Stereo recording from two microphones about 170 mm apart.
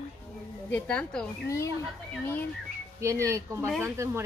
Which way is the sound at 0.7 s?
10° left (ahead or behind).